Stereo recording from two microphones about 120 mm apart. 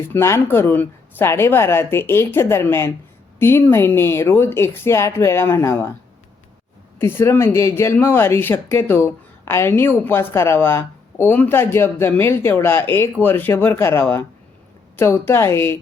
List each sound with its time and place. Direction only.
0.1 s a woman's voice: 20° left (ahead or behind)
7.0 s a woman's voice: 20° left (ahead or behind)